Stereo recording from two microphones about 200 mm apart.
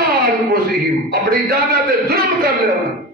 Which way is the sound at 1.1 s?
50° right (ahead or behind).